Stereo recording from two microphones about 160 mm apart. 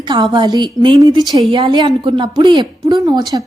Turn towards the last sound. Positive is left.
turn(degrees=-25)  # may be behind; listen again after turning